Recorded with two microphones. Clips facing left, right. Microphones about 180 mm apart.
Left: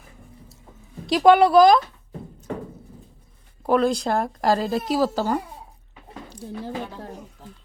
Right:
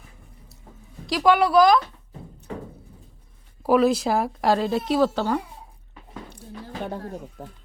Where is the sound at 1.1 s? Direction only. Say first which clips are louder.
Left 4 dB; 25° left (ahead or behind).